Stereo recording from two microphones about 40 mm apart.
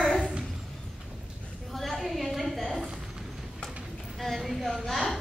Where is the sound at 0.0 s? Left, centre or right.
Centre.